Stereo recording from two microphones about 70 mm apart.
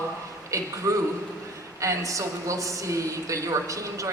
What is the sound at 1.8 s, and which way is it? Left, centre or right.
A woman's voice, right.